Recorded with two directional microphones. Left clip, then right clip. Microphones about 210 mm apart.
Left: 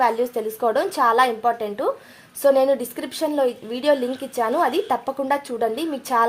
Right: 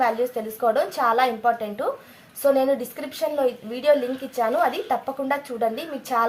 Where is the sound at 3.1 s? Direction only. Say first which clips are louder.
Left 2 dB; 45° left (ahead or behind).